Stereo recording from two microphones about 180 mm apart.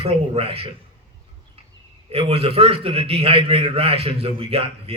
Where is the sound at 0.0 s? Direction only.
35° right (ahead or behind).